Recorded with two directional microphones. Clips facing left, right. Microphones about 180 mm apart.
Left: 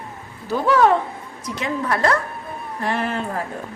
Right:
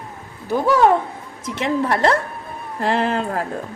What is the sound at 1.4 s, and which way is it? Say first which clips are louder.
Speech: right 4 dB; 25° right (ahead or behind).